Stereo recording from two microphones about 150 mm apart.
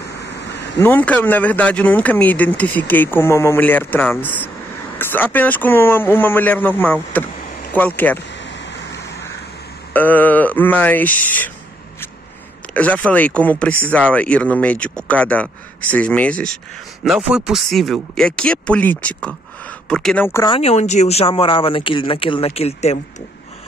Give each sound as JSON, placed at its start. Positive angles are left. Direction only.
{"t": 0.7, "sound": "speech", "side_deg": 10}
{"t": 9.9, "sound": "speech", "side_deg": 10}
{"t": 12.7, "sound": "speech", "side_deg": 10}
{"t": 17.0, "sound": "speech", "side_deg": -5}
{"t": 20.4, "sound": "speech", "side_deg": 40}